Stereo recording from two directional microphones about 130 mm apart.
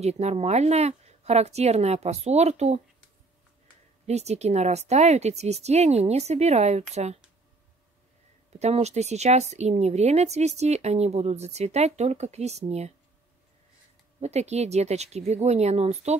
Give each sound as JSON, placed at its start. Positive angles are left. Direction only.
{"t": 0.0, "sound": "speech", "side_deg": -55}
{"t": 4.0, "sound": "speech", "side_deg": -55}
{"t": 8.5, "sound": "speech", "side_deg": -55}
{"t": 14.2, "sound": "speech", "side_deg": -55}